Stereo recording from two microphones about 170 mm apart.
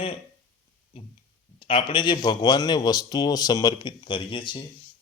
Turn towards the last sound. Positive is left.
turn(degrees=30)  # may be behind; listen again after turning